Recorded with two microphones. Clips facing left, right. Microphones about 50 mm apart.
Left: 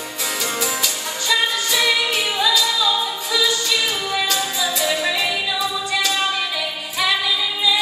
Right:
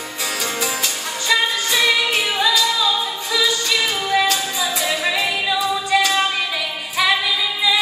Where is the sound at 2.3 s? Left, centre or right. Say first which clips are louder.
Even; right.